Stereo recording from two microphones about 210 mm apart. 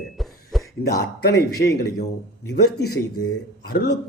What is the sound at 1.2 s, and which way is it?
Speech, 50° left (ahead or behind).